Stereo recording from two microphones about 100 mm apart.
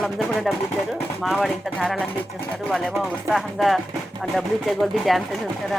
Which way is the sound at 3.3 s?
Centre (ahead or behind).